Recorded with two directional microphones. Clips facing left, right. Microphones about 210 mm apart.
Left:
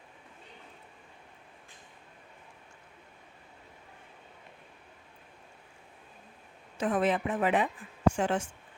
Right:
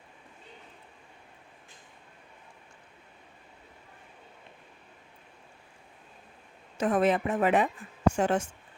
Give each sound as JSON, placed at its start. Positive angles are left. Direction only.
{"t": 6.7, "sound": "a woman's voice", "side_deg": -45}